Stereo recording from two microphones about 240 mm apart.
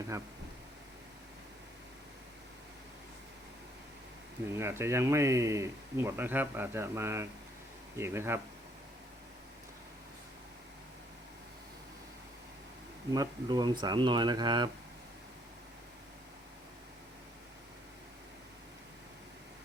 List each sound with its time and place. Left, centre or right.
4.5 s speech: centre
13.1 s speech: centre